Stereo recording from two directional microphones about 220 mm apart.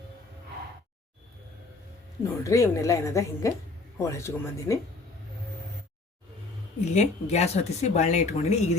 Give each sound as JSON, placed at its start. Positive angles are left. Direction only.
{"t": 2.4, "sound": "a woman's voice", "side_deg": 15}
{"t": 6.9, "sound": "speech", "side_deg": 30}